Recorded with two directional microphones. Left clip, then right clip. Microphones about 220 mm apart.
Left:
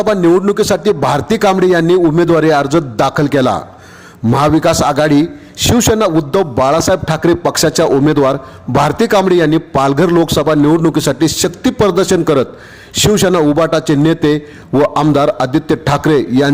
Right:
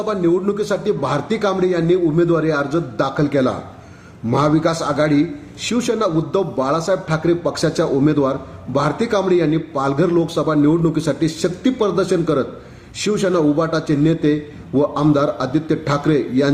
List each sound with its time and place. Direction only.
0.0 s a man's voice: 45° left (ahead or behind)